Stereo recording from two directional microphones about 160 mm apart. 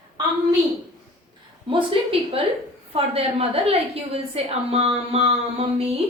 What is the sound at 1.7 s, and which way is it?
A woman's voice, 35° right (ahead or behind).